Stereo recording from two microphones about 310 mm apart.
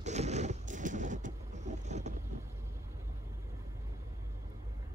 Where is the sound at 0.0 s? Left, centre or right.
Right.